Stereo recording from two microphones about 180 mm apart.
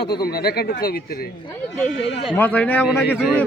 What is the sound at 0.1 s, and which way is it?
Speech, 60° left (ahead or behind).